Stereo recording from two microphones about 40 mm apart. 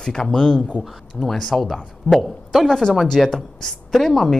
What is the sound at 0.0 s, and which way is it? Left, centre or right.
Speech, centre.